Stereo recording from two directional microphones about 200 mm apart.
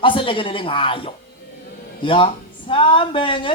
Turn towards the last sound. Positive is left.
turn(degrees=25)  # may be behind; listen again after turning